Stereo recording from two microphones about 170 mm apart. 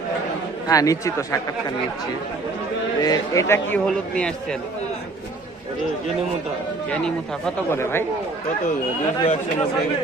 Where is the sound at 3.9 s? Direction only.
5° left (ahead or behind).